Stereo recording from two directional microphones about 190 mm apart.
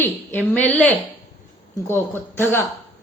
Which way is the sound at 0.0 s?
10° left (ahead or behind).